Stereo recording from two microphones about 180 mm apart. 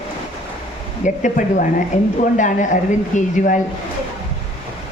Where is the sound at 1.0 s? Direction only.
45° left (ahead or behind).